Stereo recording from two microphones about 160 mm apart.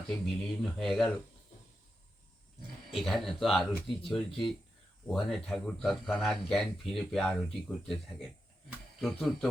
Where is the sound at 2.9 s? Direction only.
Centre (ahead or behind).